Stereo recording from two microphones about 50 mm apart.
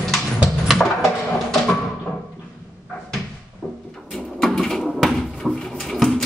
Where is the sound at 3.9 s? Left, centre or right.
Centre.